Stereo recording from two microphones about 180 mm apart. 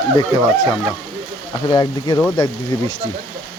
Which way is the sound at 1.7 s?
25° left (ahead or behind).